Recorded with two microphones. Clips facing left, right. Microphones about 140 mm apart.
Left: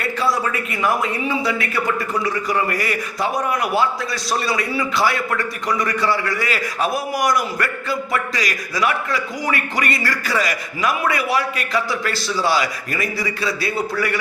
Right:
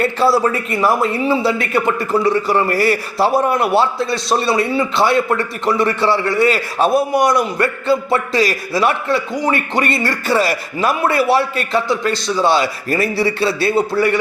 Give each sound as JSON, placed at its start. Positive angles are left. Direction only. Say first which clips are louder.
{"t": 0.0, "sound": "a man's voice", "louder": "right 7 dB", "side_deg": -30}